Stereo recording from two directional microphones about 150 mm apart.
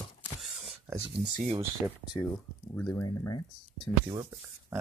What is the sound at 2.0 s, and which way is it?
Speech, 30° left (ahead or behind).